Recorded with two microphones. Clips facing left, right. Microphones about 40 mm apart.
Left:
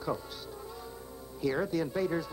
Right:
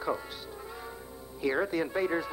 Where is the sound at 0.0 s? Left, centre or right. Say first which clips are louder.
Right 2 dB; right.